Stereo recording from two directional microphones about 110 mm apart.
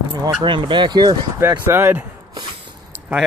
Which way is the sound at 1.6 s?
20° right (ahead or behind).